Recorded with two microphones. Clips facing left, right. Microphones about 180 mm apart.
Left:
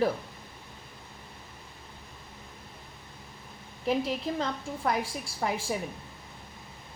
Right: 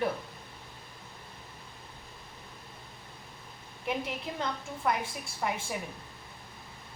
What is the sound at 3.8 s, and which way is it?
A woman's voice, 30° left (ahead or behind).